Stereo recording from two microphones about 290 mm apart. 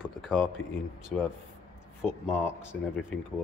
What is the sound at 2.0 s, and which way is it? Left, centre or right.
Speech, centre.